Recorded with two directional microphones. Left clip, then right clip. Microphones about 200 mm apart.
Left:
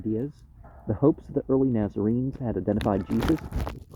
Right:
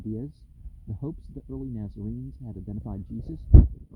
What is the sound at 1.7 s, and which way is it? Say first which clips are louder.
Speech: left 13 dB; 55° right (ahead or behind).